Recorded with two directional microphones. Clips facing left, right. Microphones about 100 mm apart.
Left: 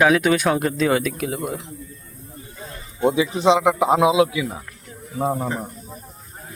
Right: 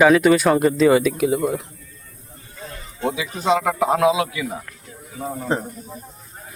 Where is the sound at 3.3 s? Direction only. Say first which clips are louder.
Left 3 dB; 20° left (ahead or behind).